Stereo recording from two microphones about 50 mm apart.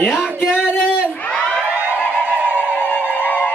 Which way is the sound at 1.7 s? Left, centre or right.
Right.